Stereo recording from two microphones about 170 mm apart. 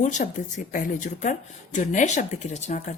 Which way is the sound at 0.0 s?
45° left (ahead or behind).